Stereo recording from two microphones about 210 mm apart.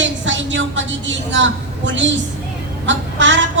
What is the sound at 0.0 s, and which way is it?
A woman's voice, 60° right (ahead or behind).